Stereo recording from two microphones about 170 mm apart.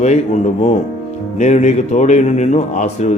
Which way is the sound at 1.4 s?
45° left (ahead or behind).